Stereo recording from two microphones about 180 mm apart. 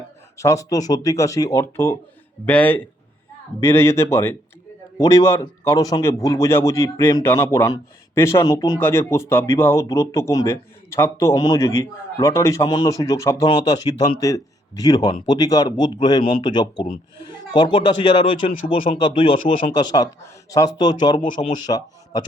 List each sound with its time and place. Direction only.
0.3 s a man's voice: 15° left (ahead or behind)
13.4 s speech: 30° left (ahead or behind)
21.2 s a man's voice: 45° left (ahead or behind)
21.7 s speech: 25° left (ahead or behind)